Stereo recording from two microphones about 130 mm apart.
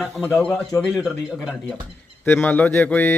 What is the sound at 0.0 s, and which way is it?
Speech, centre (ahead or behind).